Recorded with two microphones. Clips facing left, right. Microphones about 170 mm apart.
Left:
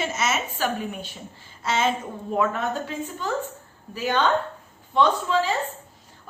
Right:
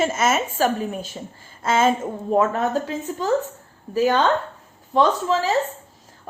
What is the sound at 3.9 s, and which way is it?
Speech, 40° right (ahead or behind).